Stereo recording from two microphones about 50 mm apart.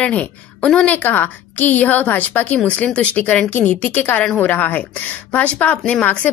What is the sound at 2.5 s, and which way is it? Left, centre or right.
Speech, left.